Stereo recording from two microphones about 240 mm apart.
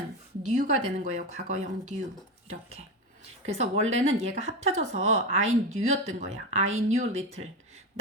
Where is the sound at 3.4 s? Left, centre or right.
Right.